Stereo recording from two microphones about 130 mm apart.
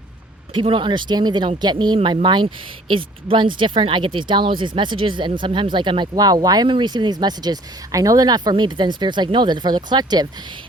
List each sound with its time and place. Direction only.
0.5 s speech: 40° right (ahead or behind)